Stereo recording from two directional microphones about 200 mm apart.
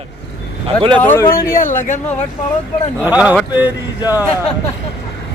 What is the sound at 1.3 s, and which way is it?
Speech, 45° left (ahead or behind).